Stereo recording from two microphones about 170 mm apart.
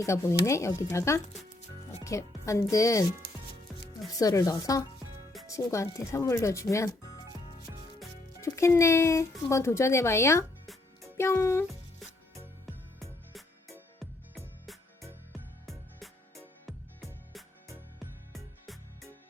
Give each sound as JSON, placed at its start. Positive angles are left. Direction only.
{"t": 0.0, "sound": "speech", "side_deg": 15}
{"t": 8.4, "sound": "a child's voice", "side_deg": 15}
{"t": 13.0, "sound": "music", "side_deg": 0}
{"t": 18.3, "sound": "music", "side_deg": 0}